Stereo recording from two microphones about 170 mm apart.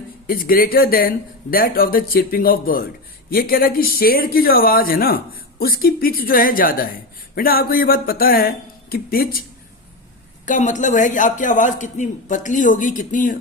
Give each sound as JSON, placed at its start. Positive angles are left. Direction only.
{"t": 0.3, "sound": "speech", "side_deg": 60}
{"t": 10.4, "sound": "a man's voice", "side_deg": 45}